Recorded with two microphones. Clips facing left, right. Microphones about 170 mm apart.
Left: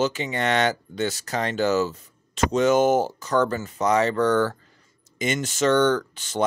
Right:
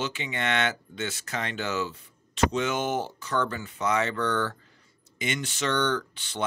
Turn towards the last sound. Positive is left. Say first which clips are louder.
# left 6 dB
turn(degrees=45)  # may be behind; listen again after turning